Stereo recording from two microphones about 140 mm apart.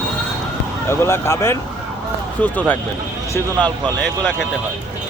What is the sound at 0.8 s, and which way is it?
Speech, 20° left (ahead or behind).